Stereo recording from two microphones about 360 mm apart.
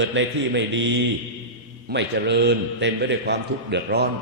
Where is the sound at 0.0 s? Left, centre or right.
Right.